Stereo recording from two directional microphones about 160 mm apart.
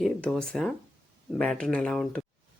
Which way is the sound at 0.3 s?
5° left (ahead or behind).